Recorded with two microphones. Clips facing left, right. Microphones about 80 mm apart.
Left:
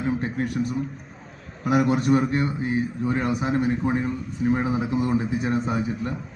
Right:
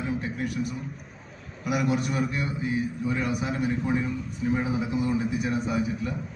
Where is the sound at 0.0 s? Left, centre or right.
Left.